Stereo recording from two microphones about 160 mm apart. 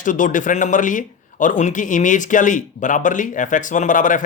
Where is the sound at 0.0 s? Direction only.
55° left (ahead or behind).